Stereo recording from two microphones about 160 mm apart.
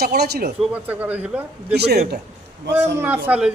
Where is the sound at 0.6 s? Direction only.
10° right (ahead or behind).